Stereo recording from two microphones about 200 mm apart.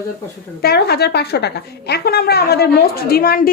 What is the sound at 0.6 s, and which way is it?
A woman's voice, 50° left (ahead or behind).